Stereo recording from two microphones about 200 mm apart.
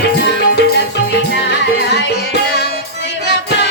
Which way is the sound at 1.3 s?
60° left (ahead or behind).